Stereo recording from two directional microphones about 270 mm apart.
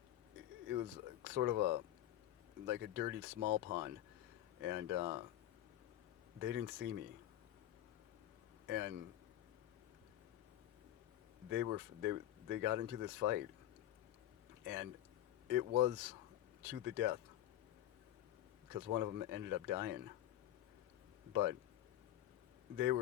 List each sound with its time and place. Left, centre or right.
1.3 s speech: right
4.6 s speech: right
6.4 s speech: right
8.6 s speech: right
11.4 s speech: right
14.6 s speech: right
18.7 s speech: right
22.7 s speech: right